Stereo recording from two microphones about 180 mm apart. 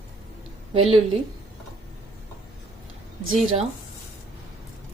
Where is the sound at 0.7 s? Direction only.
30° right (ahead or behind).